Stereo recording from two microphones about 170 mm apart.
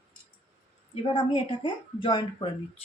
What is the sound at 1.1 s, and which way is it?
A woman's voice, 30° left (ahead or behind).